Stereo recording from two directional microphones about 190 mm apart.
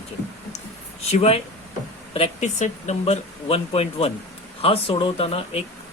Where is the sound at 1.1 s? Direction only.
30° left (ahead or behind).